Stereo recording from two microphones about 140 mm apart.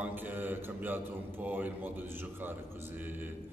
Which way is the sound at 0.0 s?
15° right (ahead or behind).